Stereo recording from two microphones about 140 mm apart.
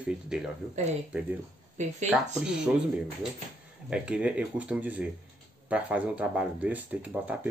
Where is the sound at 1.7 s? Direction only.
55° right (ahead or behind).